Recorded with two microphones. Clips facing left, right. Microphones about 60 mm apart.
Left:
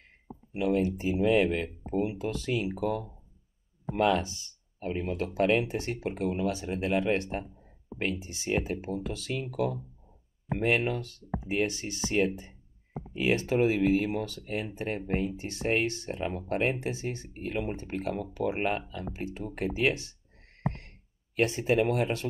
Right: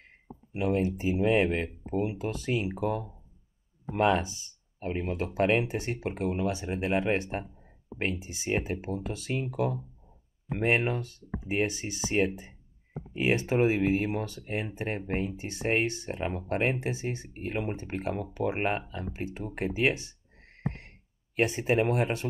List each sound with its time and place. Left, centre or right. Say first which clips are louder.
0.6 s speech: left 1 dB; right
21.4 s speech: even; right